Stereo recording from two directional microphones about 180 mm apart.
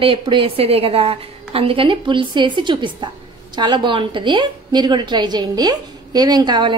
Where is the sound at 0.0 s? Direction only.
30° right (ahead or behind).